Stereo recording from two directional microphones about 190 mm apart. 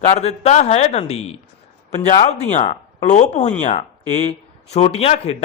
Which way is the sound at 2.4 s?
35° left (ahead or behind).